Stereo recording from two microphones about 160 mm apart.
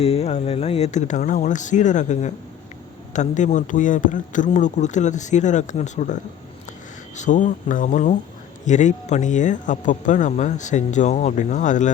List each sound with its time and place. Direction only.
0.0 s speech: 40° left (ahead or behind)
7.2 s speech: 50° left (ahead or behind)